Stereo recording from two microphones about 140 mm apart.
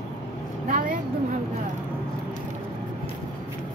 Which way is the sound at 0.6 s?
75° right (ahead or behind).